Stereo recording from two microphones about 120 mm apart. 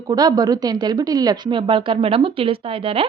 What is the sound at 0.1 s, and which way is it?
A woman's voice, 35° right (ahead or behind).